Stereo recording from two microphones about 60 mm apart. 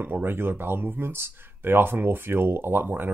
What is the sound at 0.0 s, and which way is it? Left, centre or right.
Speech, right.